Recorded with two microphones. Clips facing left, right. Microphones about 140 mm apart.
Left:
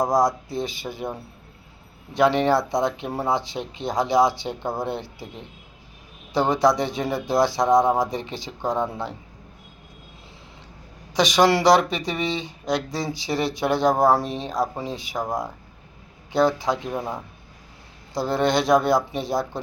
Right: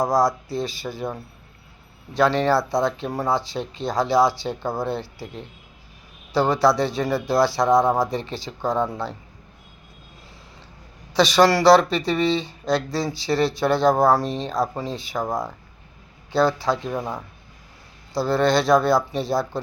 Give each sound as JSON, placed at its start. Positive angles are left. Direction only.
{"t": 0.0, "sound": "speech", "side_deg": 20}
{"t": 2.1, "sound": "speech", "side_deg": 20}
{"t": 11.1, "sound": "speech", "side_deg": 15}